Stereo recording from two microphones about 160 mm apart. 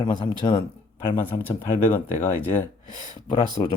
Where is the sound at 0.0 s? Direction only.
30° left (ahead or behind).